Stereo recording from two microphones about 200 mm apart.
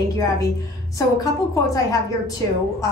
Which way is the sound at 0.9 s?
15° left (ahead or behind).